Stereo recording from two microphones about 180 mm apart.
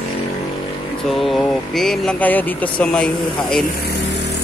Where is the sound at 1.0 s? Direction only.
Centre (ahead or behind).